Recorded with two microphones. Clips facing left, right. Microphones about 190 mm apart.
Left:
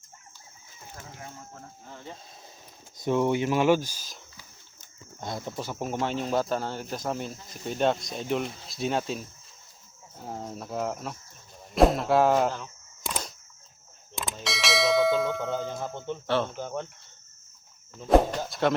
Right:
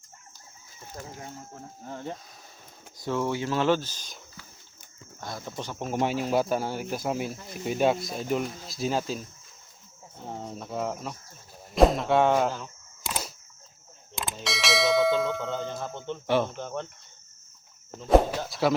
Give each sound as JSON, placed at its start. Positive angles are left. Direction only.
{"t": 1.9, "sound": "speech", "side_deg": -50}
{"t": 3.0, "sound": "speech", "side_deg": 20}
{"t": 5.2, "sound": "speech", "side_deg": 20}
{"t": 5.5, "sound": "speech", "side_deg": 5}
{"t": 5.9, "sound": "speech", "side_deg": -10}
{"t": 11.7, "sound": "a sound", "side_deg": 0}
{"t": 14.4, "sound": "church bell", "side_deg": 0}
{"t": 16.2, "sound": "speech", "side_deg": -15}
{"t": 16.5, "sound": "speech", "side_deg": 5}
{"t": 18.1, "sound": "speech", "side_deg": 0}